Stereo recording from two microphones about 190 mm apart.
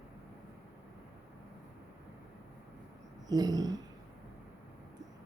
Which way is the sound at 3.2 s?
20° right (ahead or behind).